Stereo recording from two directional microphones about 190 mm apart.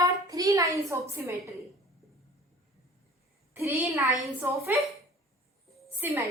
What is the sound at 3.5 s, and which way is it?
A woman's voice, 10° right (ahead or behind).